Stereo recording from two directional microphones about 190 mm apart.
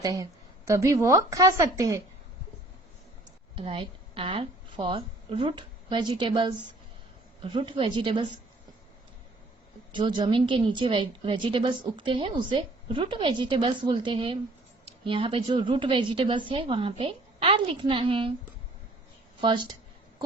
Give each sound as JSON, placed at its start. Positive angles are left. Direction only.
{"t": 0.0, "sound": "speech", "side_deg": -20}
{"t": 3.5, "sound": "a woman's voice", "side_deg": -25}
{"t": 9.9, "sound": "a woman's voice", "side_deg": -25}
{"t": 19.4, "sound": "a woman's voice", "side_deg": -25}